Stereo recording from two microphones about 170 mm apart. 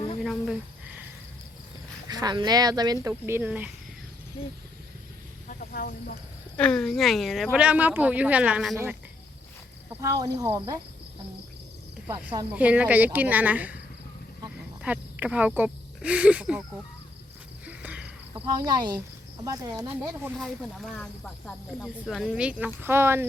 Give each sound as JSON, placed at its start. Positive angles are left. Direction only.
{"t": 0.2, "sound": "a sound", "side_deg": 0}
{"t": 2.0, "sound": "speech", "side_deg": -25}
{"t": 4.4, "sound": "speech", "side_deg": 30}
{"t": 5.5, "sound": "snake", "side_deg": 60}
{"t": 6.6, "sound": "speech", "side_deg": 5}
{"t": 9.9, "sound": "speech", "side_deg": -20}
{"t": 12.0, "sound": "speech", "side_deg": -10}
{"t": 14.8, "sound": "speech", "side_deg": -10}
{"t": 17.7, "sound": "a sound", "side_deg": -5}
{"t": 18.6, "sound": "speech", "side_deg": -25}
{"t": 20.0, "sound": "speech", "side_deg": -5}